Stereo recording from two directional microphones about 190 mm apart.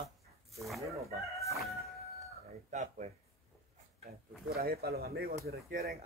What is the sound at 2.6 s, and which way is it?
Speech, 40° right (ahead or behind).